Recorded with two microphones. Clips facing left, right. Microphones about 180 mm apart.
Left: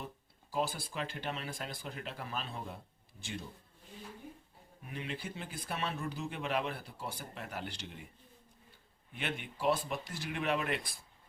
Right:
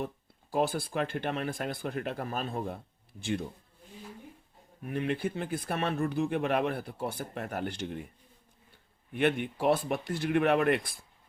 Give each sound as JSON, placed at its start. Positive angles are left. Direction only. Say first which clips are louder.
{"t": 0.5, "sound": "speech", "louder": "right 7 dB", "side_deg": -55}
{"t": 4.8, "sound": "speech", "louder": "right 11 dB", "side_deg": -55}
{"t": 9.1, "sound": "speech", "louder": "right 12 dB", "side_deg": -55}